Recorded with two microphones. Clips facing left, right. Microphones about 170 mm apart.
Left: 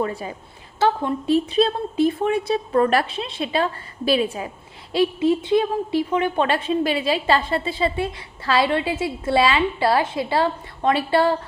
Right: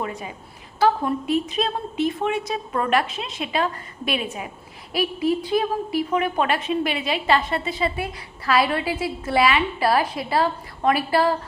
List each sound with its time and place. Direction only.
0.0 s a woman's voice: 35° left (ahead or behind)